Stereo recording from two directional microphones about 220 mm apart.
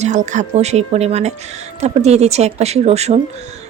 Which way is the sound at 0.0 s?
35° right (ahead or behind).